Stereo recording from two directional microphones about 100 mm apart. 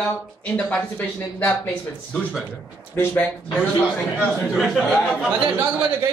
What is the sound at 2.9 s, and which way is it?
Speech, 20° left (ahead or behind).